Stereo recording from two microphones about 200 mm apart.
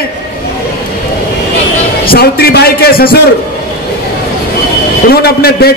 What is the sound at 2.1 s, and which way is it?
A man's voice, 50° left (ahead or behind).